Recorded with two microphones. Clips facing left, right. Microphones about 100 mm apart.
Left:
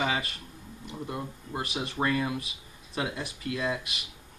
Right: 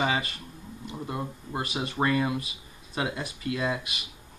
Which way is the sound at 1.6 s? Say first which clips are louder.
Right 2 dB; centre (ahead or behind).